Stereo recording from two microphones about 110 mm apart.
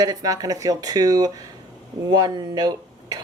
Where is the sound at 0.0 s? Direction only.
35° right (ahead or behind).